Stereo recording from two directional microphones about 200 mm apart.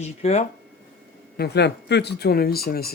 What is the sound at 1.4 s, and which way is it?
Speech, 55° left (ahead or behind).